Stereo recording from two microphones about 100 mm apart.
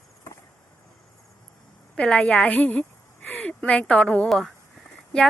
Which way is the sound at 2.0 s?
10° left (ahead or behind).